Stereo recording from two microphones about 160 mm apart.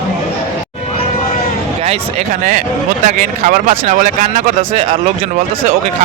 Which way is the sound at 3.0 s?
55° right (ahead or behind).